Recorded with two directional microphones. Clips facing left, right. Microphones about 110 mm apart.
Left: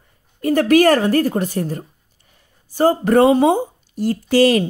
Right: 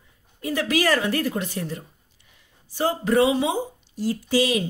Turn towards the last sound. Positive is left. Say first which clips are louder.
# left 8 dB
turn(degrees=70)  # may be behind; listen again after turning